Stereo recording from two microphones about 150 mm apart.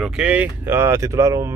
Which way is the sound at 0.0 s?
10° right (ahead or behind).